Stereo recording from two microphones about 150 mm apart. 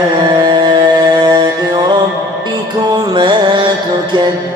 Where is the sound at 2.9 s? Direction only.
30° right (ahead or behind).